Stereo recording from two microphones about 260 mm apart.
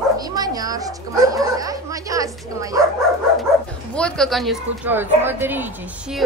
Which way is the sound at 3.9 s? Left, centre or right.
Centre.